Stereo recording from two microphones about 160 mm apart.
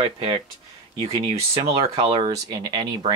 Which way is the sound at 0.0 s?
35° right (ahead or behind).